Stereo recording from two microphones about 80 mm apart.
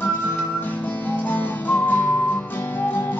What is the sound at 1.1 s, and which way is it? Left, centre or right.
Music, left.